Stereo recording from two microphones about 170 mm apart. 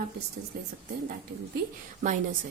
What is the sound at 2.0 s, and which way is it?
Speech, 50° right (ahead or behind).